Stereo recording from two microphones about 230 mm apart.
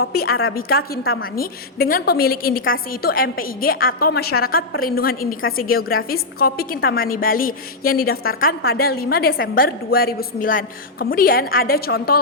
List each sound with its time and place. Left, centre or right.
0.0 s a woman's voice: left